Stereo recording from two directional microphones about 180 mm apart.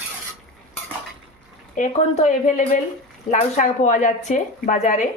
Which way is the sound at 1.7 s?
40° left (ahead or behind).